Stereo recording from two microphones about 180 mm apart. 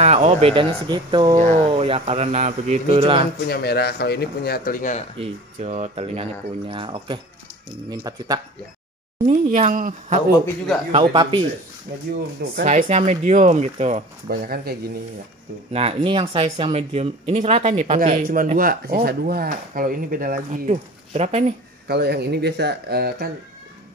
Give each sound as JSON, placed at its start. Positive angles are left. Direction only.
{"t": 0.0, "sound": "speech", "side_deg": -40}
{"t": 3.4, "sound": "speech", "side_deg": 60}
{"t": 5.2, "sound": "speech", "side_deg": -40}
{"t": 9.3, "sound": "speech", "side_deg": -45}
{"t": 10.9, "sound": "speech", "side_deg": -30}
{"t": 12.6, "sound": "speech", "side_deg": -40}
{"t": 14.3, "sound": "speech", "side_deg": -55}
{"t": 15.7, "sound": "speech", "side_deg": -30}
{"t": 20.7, "sound": "speech", "side_deg": -35}
{"t": 21.8, "sound": "speech", "side_deg": -65}